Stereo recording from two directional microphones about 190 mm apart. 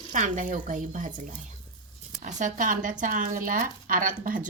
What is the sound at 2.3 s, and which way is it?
Speech, 40° right (ahead or behind).